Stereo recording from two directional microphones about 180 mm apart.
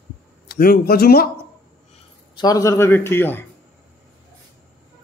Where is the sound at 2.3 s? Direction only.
20° left (ahead or behind).